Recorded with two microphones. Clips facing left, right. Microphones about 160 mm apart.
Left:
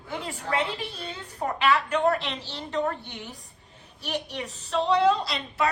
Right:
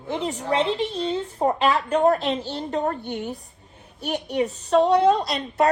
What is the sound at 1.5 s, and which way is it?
A woman's voice, 35° right (ahead or behind).